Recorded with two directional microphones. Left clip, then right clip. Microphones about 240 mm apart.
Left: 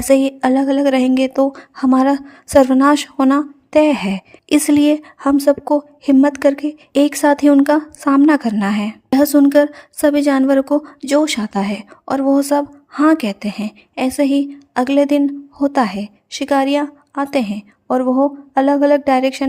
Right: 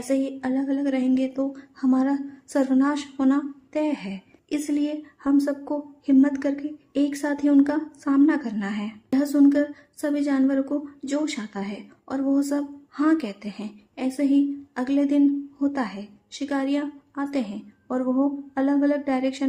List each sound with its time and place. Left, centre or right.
0.1 s speech: left